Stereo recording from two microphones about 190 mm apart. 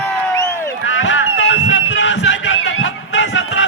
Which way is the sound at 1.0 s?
80° left.